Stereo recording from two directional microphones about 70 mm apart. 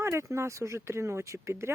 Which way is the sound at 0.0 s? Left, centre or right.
Right.